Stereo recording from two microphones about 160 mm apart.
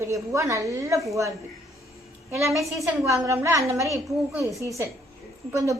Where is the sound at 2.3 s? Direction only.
15° right (ahead or behind).